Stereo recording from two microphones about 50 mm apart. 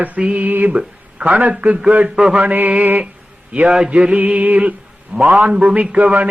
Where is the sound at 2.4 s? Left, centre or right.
Right.